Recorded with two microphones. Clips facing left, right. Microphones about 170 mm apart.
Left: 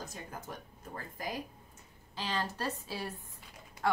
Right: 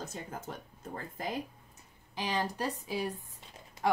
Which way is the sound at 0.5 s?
25° right (ahead or behind).